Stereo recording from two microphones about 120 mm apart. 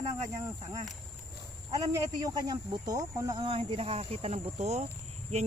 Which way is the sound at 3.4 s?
50° right (ahead or behind).